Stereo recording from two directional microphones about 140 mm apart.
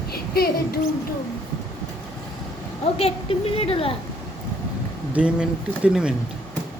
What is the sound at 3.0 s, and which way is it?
Speech, 45° left (ahead or behind).